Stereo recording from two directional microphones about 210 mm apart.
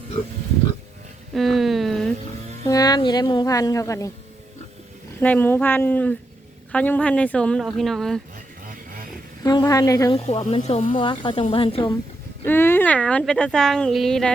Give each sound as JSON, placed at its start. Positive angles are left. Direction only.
{"t": 1.3, "sound": "a sound", "side_deg": 0}
{"t": 2.6, "sound": "speech", "side_deg": 15}
{"t": 5.2, "sound": "speech", "side_deg": 10}
{"t": 8.6, "sound": "a sound", "side_deg": -40}
{"t": 9.4, "sound": "speech", "side_deg": 20}
{"t": 10.2, "sound": "speech", "side_deg": 30}
{"t": 12.5, "sound": "speech", "side_deg": 10}